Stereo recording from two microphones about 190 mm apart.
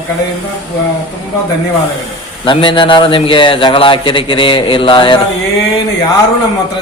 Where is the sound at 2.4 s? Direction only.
25° left (ahead or behind).